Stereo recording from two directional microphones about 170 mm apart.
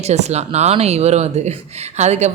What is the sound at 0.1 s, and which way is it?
Speech, 40° right (ahead or behind).